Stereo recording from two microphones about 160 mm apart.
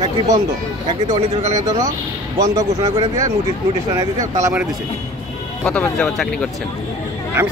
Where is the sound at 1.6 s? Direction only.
20° right (ahead or behind).